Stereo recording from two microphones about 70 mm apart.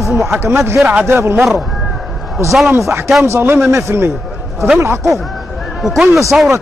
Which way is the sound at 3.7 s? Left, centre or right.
Right.